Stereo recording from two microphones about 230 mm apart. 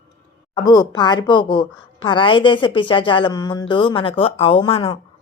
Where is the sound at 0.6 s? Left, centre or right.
Centre.